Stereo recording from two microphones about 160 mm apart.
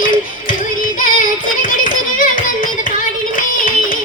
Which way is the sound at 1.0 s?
55° left (ahead or behind).